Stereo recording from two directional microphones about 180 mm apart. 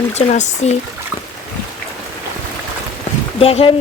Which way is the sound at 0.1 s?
40° left (ahead or behind).